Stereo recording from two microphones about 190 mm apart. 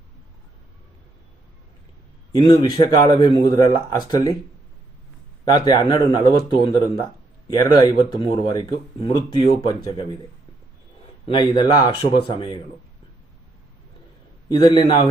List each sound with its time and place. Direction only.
2.3 s speech: 25° left (ahead or behind)
5.5 s speech: 20° left (ahead or behind)
11.3 s speech: 25° left (ahead or behind)
14.5 s speech: 25° left (ahead or behind)